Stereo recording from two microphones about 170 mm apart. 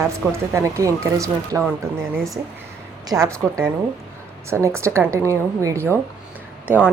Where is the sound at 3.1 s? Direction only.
20° right (ahead or behind).